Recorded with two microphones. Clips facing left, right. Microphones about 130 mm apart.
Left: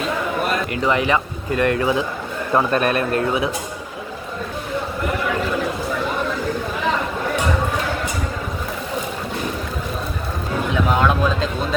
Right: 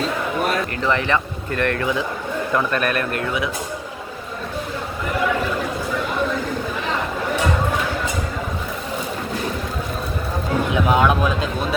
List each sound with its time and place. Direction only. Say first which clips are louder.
0.9 s speech: left 2 dB; 15° left (ahead or behind)
2.5 s speech: left 4 dB; 30° left (ahead or behind)
10.8 s speech: right 1 dB; 15° right (ahead or behind)